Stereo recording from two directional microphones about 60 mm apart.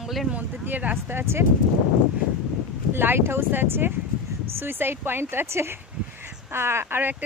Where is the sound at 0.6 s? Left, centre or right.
Right.